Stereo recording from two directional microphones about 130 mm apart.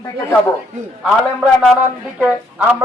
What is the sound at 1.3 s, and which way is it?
Speech, 5° left (ahead or behind).